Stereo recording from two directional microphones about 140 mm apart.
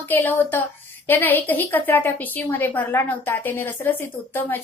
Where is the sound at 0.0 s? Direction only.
15° left (ahead or behind).